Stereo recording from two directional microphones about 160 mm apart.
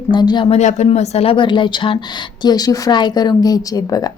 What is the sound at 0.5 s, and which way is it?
Speech, 45° left (ahead or behind).